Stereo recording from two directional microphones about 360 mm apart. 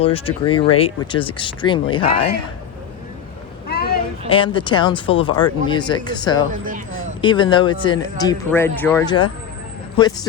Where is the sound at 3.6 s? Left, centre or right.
Left.